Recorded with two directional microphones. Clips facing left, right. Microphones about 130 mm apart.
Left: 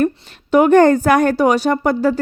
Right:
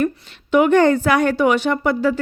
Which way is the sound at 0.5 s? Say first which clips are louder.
Left 3 dB; 45° left (ahead or behind).